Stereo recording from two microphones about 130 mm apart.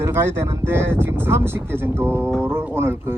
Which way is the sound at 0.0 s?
20° right (ahead or behind).